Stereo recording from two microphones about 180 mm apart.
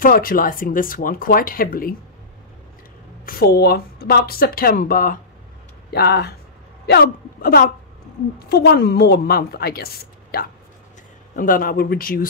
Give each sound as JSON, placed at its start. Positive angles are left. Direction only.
{"t": 0.0, "sound": "speech", "side_deg": 50}
{"t": 3.3, "sound": "a woman's voice", "side_deg": 60}
{"t": 5.9, "sound": "a woman's voice", "side_deg": 60}